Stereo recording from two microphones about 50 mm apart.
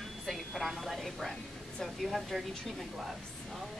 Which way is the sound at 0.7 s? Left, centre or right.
Centre.